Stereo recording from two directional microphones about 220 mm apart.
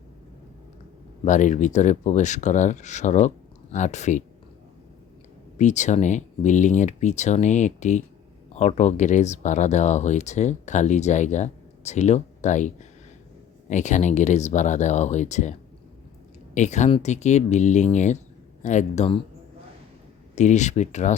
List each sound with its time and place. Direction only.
1.2 s speech: 35° left (ahead or behind)
5.5 s speech: 30° left (ahead or behind)
16.6 s speech: 30° left (ahead or behind)
20.3 s speech: 30° left (ahead or behind)